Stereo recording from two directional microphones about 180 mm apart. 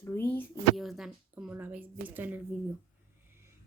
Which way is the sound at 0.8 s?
Centre (ahead or behind).